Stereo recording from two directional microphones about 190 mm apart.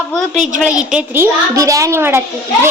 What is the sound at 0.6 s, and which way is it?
A child's voice, 5° right (ahead or behind).